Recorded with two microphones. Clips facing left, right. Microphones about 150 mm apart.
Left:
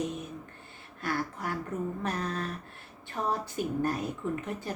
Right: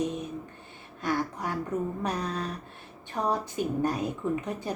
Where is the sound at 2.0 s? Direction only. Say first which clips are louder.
Right 2 dB; 15° right (ahead or behind).